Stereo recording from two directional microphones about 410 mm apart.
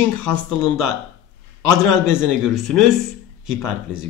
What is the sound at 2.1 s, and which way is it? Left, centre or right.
Speech, centre.